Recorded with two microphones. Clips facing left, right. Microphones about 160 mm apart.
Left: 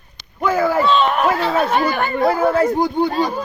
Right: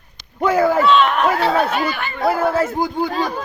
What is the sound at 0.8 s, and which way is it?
Speech, 35° left (ahead or behind).